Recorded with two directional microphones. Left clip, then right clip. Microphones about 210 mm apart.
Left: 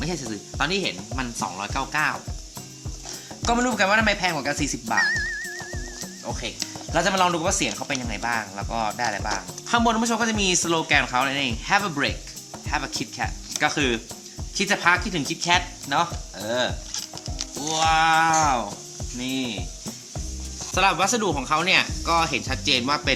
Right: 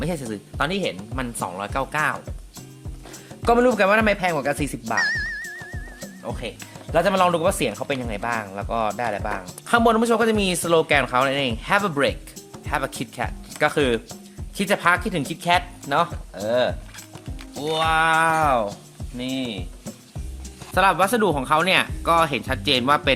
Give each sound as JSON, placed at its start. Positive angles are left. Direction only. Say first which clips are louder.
{"t": 0.0, "sound": "speech", "louder": "right 2 dB", "side_deg": -50}
{"t": 3.4, "sound": "speech", "louder": "right 5 dB", "side_deg": -50}
{"t": 4.9, "sound": "music", "louder": "even", "side_deg": 0}
{"t": 6.3, "sound": "speech", "louder": "left 1 dB", "side_deg": -45}
{"t": 20.7, "sound": "speech", "louder": "right 3 dB", "side_deg": -50}